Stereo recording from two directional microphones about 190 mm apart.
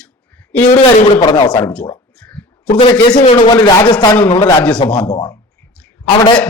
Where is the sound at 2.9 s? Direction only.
20° left (ahead or behind).